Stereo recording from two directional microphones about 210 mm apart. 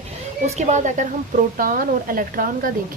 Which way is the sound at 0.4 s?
35° right (ahead or behind).